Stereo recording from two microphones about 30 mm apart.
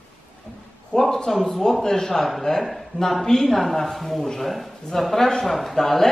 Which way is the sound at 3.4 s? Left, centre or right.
Centre.